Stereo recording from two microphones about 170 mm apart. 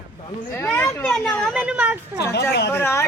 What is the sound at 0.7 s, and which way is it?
Speech, 15° left (ahead or behind).